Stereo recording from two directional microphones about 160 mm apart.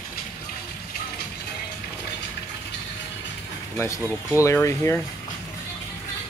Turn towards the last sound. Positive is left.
turn(degrees=15)  # may be behind; listen again after turning